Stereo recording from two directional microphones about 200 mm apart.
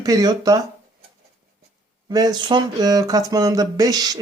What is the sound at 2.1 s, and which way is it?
Speech, 20° right (ahead or behind).